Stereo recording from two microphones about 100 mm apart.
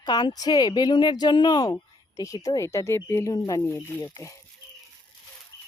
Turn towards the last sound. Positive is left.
turn(degrees=25)  # may be behind; listen again after turning